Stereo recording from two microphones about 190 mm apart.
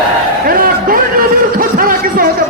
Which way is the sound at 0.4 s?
50° right (ahead or behind).